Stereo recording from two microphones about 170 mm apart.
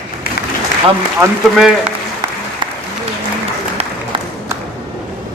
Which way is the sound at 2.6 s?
30° right (ahead or behind).